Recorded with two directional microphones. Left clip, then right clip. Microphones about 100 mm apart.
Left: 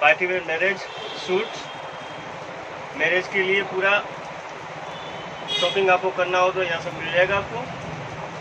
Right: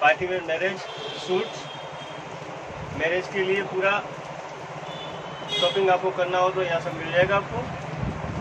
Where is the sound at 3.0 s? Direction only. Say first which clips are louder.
Left 4 dB; 5° left (ahead or behind).